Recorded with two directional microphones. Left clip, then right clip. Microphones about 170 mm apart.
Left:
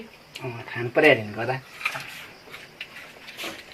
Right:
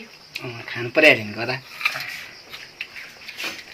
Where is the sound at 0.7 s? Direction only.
45° right (ahead or behind).